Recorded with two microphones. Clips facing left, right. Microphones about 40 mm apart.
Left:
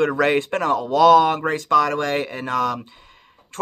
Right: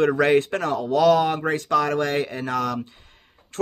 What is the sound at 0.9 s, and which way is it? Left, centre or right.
Speech, left.